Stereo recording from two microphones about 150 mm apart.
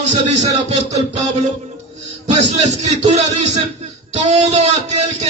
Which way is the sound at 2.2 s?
50° right (ahead or behind).